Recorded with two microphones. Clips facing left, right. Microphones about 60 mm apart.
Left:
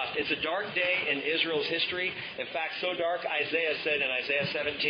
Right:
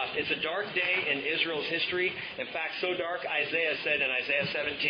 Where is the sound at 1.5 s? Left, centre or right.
Right.